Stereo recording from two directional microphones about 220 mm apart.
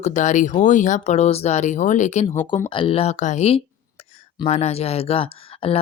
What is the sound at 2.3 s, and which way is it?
Speech, 10° left (ahead or behind).